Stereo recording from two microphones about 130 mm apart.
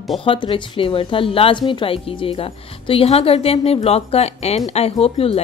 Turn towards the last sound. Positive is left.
turn(degrees=50)  # may be behind; listen again after turning